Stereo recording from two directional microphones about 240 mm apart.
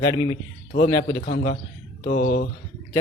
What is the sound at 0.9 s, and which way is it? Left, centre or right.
A man's voice, left.